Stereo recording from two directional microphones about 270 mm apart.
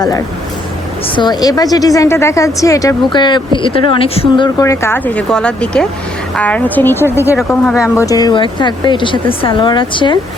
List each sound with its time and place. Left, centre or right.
1.1 s a woman's voice: centre
8.0 s a woman's voice: centre